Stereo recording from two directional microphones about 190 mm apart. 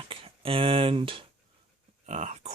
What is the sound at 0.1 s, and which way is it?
Speech, 30° right (ahead or behind).